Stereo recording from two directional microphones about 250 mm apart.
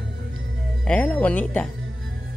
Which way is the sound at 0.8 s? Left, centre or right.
Centre.